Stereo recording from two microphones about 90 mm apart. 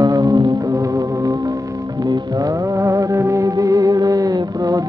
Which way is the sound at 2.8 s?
35° right (ahead or behind).